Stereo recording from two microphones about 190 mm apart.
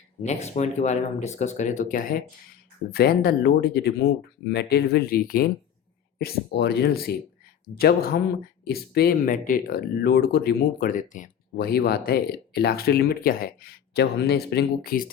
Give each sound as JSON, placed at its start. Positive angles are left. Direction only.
{"t": 0.2, "sound": "speech", "side_deg": 35}